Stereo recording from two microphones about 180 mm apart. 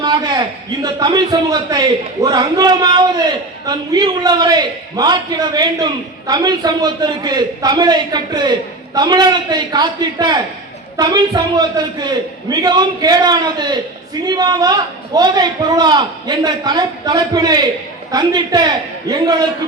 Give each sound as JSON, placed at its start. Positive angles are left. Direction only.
{"t": 0.0, "sound": "a man's voice", "side_deg": -25}